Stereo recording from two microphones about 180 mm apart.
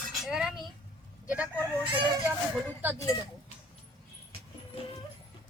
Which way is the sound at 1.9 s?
25° right (ahead or behind).